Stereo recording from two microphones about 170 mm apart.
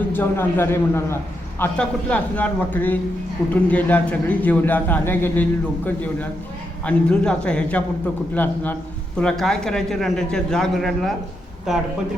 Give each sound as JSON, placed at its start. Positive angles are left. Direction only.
{"t": 0.1, "sound": "a man's voice", "side_deg": 10}